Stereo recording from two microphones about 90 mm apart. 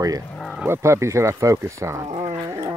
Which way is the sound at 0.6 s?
30° right (ahead or behind).